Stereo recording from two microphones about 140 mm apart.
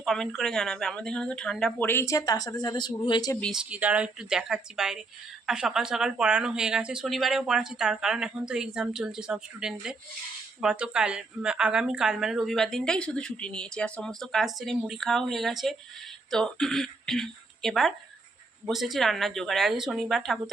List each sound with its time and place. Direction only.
0.0 s a woman's voice: centre (ahead or behind)
1.9 s speech: 20° left (ahead or behind)
3.5 s a woman's voice: 10° right (ahead or behind)